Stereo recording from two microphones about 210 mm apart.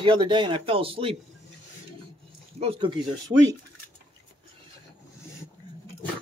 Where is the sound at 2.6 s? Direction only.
25° right (ahead or behind).